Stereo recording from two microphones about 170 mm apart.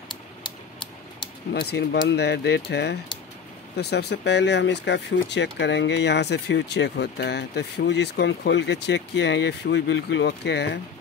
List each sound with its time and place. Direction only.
1.5 s speech: 75° left (ahead or behind); by 10.8 s 90° left